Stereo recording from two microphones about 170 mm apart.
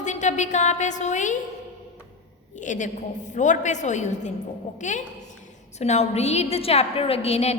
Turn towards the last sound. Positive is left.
turn(degrees=40)  # may be behind; listen again after turning